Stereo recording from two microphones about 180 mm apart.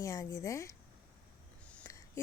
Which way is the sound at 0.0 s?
15° left (ahead or behind).